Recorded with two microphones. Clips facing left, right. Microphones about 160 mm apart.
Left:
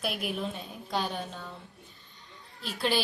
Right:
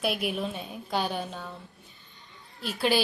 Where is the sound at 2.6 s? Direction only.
5° right (ahead or behind).